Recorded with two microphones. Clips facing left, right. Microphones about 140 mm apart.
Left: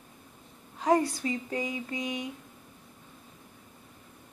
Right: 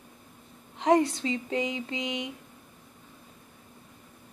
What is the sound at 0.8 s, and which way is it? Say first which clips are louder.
Speech: right 2 dB; 20° right (ahead or behind).